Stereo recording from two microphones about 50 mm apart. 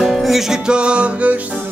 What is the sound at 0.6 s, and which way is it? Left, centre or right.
Music, centre.